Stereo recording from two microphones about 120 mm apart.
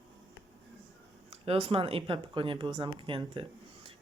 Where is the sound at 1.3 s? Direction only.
55° right (ahead or behind).